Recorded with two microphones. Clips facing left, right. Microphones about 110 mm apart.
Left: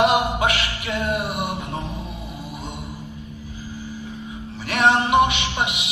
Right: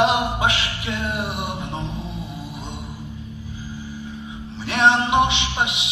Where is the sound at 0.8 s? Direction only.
15° left (ahead or behind).